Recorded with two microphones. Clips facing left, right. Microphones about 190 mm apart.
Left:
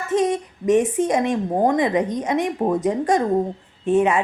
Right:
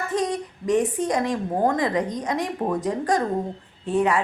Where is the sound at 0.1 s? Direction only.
20° left (ahead or behind).